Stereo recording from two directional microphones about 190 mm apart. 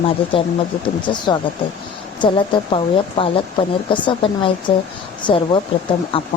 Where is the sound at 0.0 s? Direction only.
25° left (ahead or behind).